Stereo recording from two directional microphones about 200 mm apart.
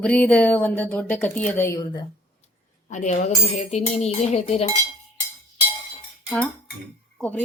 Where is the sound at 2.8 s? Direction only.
35° left (ahead or behind).